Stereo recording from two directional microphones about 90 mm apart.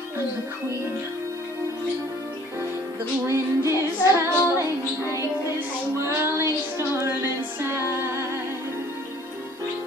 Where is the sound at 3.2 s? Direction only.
30° right (ahead or behind).